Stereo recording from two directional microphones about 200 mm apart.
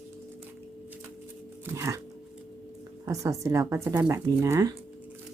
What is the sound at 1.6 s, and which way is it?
Music, 15° right (ahead or behind).